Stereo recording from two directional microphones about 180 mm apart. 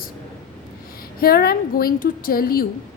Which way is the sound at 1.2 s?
55° left (ahead or behind).